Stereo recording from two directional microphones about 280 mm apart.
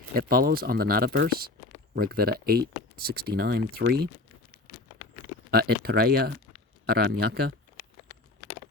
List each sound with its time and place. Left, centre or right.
0.1 s speech: right
5.5 s speech: right